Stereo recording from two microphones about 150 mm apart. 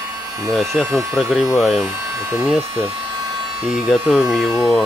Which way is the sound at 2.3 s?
10° right (ahead or behind).